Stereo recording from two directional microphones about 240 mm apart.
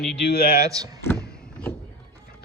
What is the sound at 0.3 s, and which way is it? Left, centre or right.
Speech, left.